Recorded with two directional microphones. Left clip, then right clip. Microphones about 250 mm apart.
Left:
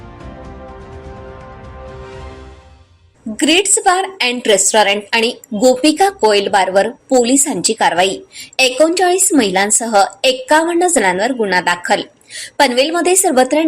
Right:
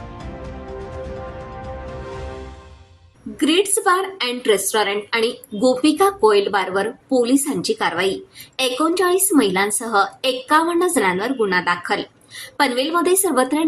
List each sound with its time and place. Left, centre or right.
3.9 s a woman's voice: centre